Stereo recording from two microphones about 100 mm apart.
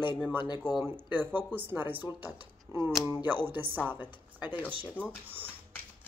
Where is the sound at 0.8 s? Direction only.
20° right (ahead or behind).